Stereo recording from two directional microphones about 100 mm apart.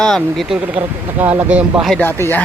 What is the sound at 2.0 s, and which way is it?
Speech, 20° left (ahead or behind).